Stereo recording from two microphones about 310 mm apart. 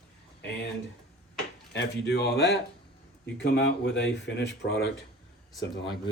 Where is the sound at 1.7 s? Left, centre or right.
Left.